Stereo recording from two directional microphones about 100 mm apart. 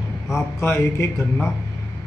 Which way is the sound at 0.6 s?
25° left (ahead or behind).